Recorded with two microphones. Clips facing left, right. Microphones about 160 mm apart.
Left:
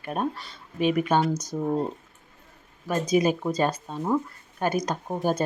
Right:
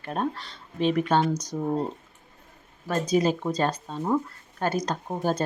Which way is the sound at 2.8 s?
10° left (ahead or behind).